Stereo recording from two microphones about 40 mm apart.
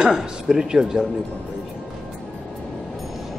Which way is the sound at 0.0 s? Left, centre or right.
Centre.